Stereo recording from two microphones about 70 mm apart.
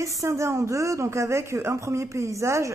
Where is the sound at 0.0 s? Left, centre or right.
Right.